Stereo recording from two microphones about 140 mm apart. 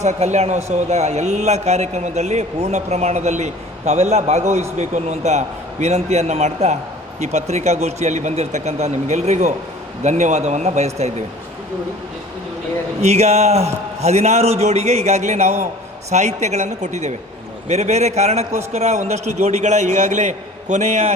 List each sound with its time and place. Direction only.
0.0 s speech: 55° right (ahead or behind)
13.0 s a woman's voice: 50° right (ahead or behind)